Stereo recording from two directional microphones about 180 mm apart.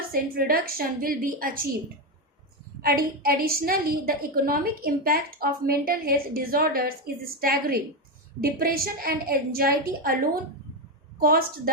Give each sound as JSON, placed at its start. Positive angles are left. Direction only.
{"t": 0.1, "sound": "a woman's voice", "side_deg": -55}
{"t": 2.8, "sound": "a woman's voice", "side_deg": -55}